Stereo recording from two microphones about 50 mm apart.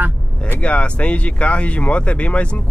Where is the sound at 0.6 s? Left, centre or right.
Left.